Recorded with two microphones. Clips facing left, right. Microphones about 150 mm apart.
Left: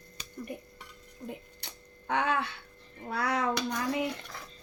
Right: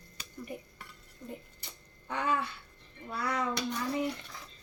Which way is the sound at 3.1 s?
90° left.